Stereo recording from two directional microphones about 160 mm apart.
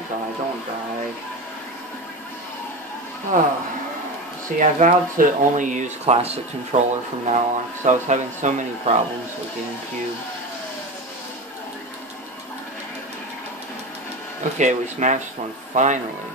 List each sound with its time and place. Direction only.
3.3 s speech: 60° right (ahead or behind)
4.6 s speech: 55° right (ahead or behind)
14.6 s a man's voice: 50° right (ahead or behind)